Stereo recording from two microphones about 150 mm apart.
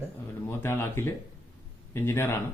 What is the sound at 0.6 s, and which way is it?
A man's voice, 15° left (ahead or behind).